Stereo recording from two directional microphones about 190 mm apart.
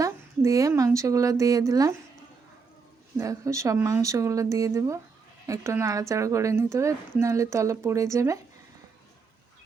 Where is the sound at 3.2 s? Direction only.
15° right (ahead or behind).